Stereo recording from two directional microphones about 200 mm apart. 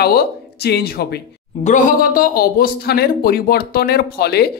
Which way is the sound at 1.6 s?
40° left (ahead or behind).